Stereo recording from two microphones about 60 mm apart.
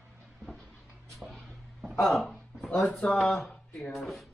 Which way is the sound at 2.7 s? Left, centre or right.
Centre.